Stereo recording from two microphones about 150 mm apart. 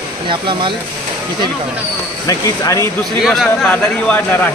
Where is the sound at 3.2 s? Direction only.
Centre (ahead or behind).